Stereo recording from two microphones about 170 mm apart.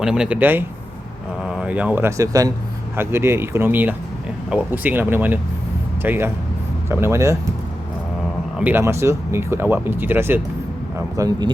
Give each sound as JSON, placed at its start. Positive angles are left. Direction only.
{"t": 0.0, "sound": "speech", "side_deg": -5}
{"t": 8.5, "sound": "speech", "side_deg": -10}